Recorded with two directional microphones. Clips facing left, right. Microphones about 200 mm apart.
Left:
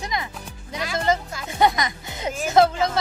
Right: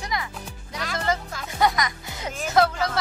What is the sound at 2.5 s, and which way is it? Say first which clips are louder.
Speech: left 3 dB; 25° left (ahead or behind).